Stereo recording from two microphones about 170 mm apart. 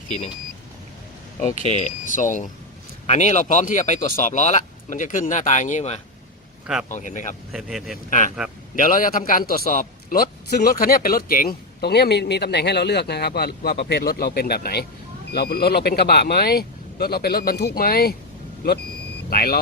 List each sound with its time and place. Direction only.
1.6 s speech: 45° left (ahead or behind)
7.5 s speech: centre (ahead or behind)
8.7 s speech: 50° left (ahead or behind)
19.3 s speech: 60° left (ahead or behind)